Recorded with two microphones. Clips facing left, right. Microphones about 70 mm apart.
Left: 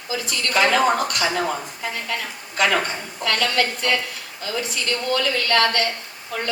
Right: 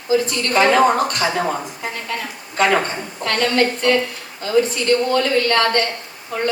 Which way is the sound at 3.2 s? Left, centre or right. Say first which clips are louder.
Right 4 dB; right.